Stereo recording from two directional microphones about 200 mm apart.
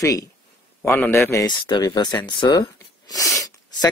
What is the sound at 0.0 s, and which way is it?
Speech, 15° left (ahead or behind).